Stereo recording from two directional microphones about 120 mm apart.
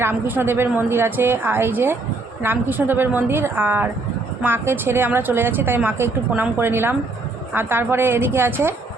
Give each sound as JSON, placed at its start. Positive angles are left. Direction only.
{"t": 0.0, "sound": "a woman's voice", "side_deg": -20}